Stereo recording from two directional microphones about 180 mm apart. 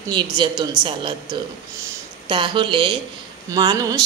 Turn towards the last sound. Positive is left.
turn(degrees=-20)  # may be behind; listen again after turning